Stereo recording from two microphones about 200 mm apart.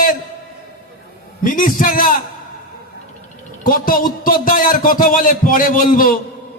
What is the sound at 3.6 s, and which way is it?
A man's voice, 45° left (ahead or behind).